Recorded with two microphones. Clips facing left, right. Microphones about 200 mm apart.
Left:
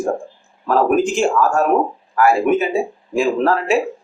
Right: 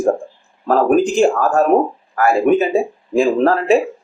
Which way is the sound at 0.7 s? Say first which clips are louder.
Right 2 dB; 35° right (ahead or behind).